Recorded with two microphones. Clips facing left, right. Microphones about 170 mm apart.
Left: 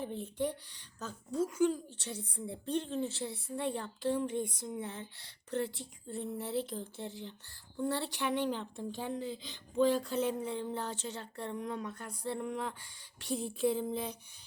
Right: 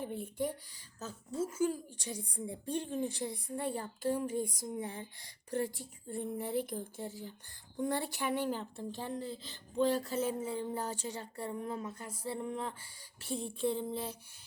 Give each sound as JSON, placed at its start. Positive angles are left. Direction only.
{"t": 0.0, "sound": "speech", "side_deg": -10}
{"t": 11.5, "sound": "speech", "side_deg": -30}
{"t": 11.9, "sound": "a sound", "side_deg": -5}